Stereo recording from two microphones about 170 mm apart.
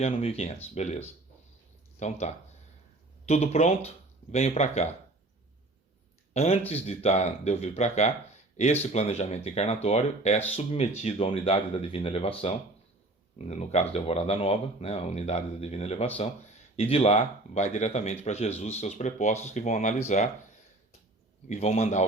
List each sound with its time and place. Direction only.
0.0 s speech: 35° left (ahead or behind)
2.0 s speech: 40° left (ahead or behind)
6.3 s speech: 40° left (ahead or behind)
21.5 s speech: 40° left (ahead or behind)